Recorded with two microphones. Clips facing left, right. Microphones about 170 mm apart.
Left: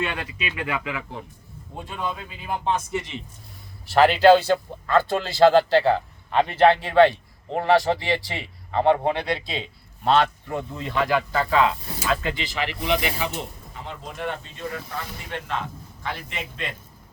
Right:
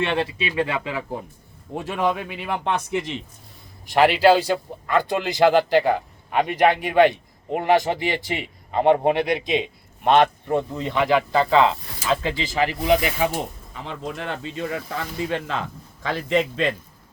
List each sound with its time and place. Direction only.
0.0 s speech: 30° right (ahead or behind)
1.7 s speech: 90° right
3.8 s a man's voice: 10° right (ahead or behind)
12.4 s speech: 40° right (ahead or behind)
13.8 s speech: 90° right